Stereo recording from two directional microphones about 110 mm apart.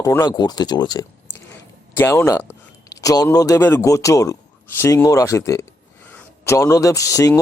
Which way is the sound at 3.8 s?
30° left (ahead or behind).